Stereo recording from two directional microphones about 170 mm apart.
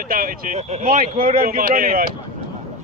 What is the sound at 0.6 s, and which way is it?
Speech, 40° right (ahead or behind).